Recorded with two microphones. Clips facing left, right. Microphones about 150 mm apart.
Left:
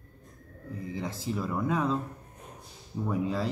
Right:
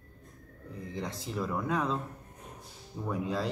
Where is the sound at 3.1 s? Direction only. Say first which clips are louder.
Left 2 dB; centre (ahead or behind).